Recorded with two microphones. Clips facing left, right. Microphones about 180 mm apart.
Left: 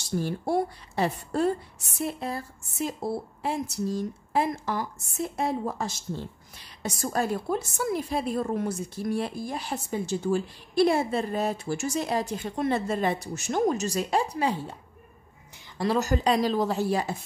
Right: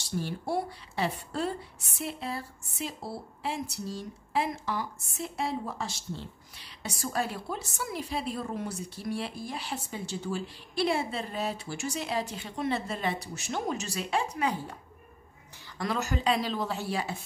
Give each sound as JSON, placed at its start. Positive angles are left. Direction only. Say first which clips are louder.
{"t": 0.2, "sound": "a woman's voice", "louder": "left 5 dB", "side_deg": 45}
{"t": 15.8, "sound": "speech", "louder": "left 6 dB", "side_deg": 35}